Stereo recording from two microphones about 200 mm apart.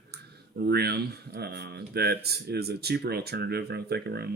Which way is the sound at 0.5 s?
55° right (ahead or behind).